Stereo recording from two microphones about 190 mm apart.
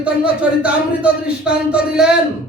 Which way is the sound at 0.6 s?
5° right (ahead or behind).